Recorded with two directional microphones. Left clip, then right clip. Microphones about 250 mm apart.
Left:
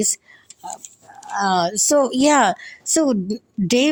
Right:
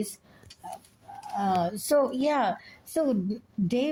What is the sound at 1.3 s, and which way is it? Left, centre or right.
A woman's voice, left.